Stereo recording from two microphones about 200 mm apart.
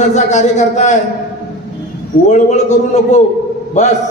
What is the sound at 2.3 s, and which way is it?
Speech, 35° left (ahead or behind).